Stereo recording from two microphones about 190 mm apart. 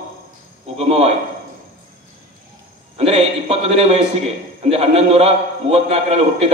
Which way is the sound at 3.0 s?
30° right (ahead or behind).